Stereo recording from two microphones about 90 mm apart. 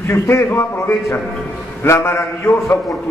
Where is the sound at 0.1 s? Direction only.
30° left (ahead or behind).